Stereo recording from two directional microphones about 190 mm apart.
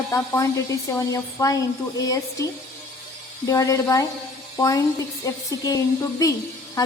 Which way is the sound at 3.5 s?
15° left (ahead or behind).